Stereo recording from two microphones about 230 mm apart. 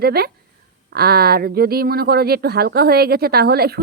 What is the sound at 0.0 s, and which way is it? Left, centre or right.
A woman's voice, right.